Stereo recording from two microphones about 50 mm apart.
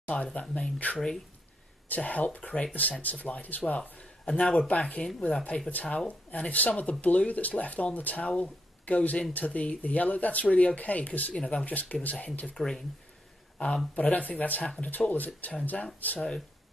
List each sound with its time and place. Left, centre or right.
0.0 s speech: left
0.9 s speech: centre
2.0 s speech: left
4.0 s speech: centre
12.5 s speech: centre
13.9 s speech: left